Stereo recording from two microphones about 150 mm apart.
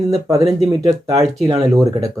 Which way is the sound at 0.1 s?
25° right (ahead or behind).